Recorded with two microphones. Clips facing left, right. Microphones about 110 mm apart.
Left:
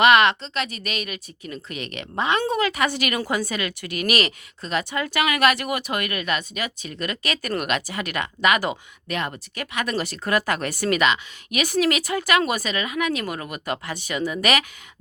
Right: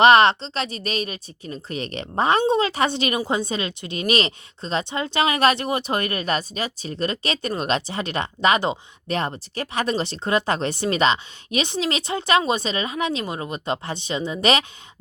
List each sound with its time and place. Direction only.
0.0 s a woman's voice: 30° right (ahead or behind)